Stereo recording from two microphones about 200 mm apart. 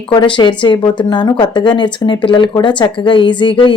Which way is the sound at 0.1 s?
25° left (ahead or behind).